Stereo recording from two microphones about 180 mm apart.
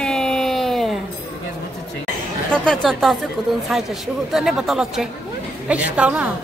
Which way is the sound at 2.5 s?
5° left (ahead or behind).